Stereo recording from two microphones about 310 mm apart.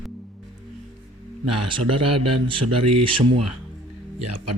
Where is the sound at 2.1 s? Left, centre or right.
Right.